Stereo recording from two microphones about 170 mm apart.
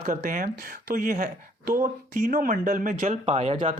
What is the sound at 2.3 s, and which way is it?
Speech, 50° right (ahead or behind).